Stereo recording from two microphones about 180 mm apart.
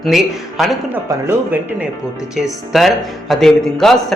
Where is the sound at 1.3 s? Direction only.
10° right (ahead or behind).